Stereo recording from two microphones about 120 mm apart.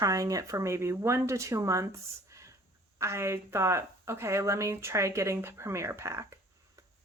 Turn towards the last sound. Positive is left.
turn(degrees=-25)  # may be behind; listen again after turning